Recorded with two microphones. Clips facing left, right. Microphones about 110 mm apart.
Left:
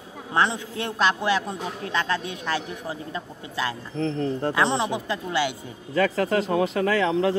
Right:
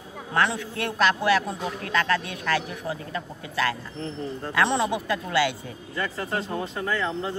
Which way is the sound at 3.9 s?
90° left.